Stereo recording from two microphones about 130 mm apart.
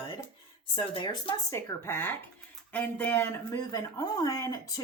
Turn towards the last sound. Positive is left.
turn(degrees=25)  # may be behind; listen again after turning